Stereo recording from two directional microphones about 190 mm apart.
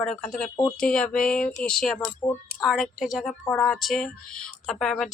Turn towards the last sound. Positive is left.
turn(degrees=0)  # may be behind; listen again after turning